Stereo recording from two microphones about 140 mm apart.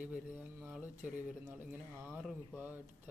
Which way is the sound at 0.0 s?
10° right (ahead or behind).